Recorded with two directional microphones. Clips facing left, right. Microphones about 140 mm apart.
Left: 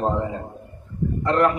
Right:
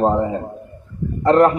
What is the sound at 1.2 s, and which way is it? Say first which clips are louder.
Speech: right 7 dB; 35° right (ahead or behind).